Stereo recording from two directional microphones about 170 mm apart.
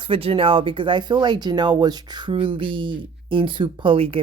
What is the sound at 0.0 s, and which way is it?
Speech, 30° right (ahead or behind).